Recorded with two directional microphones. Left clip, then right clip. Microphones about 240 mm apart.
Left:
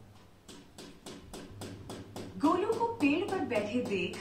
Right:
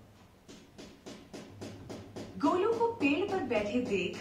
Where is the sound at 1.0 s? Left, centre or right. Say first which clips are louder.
Even; left.